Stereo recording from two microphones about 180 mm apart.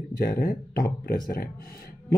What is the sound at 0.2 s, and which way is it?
Speech, 55° left (ahead or behind).